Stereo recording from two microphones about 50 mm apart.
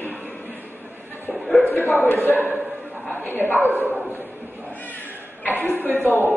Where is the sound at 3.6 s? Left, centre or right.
Right.